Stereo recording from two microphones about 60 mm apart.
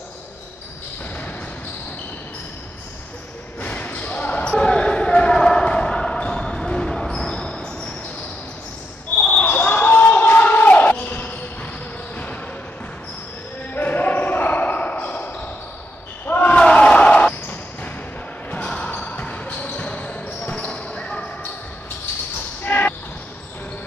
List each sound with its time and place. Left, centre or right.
3.6 s basketball bounce: left
9.2 s basketball bounce: left
13.7 s basketball bounce: left
16.5 s basketball bounce: centre
22.7 s basketball bounce: left